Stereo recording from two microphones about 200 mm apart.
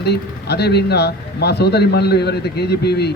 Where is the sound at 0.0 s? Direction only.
55° left (ahead or behind).